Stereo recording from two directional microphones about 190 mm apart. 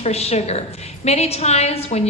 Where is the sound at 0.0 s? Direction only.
35° left (ahead or behind).